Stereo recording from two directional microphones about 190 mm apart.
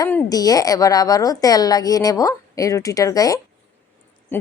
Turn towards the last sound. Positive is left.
turn(degrees=20)  # may be behind; listen again after turning